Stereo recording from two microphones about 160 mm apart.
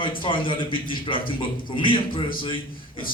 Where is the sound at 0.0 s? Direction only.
30° left (ahead or behind).